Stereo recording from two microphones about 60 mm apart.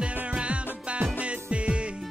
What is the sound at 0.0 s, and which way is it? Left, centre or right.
Music, right.